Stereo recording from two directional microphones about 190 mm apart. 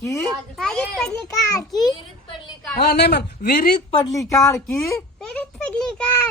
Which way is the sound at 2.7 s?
55° left (ahead or behind).